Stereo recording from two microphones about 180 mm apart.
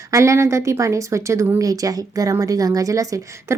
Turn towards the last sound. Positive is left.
turn(degrees=-20)  # may be behind; listen again after turning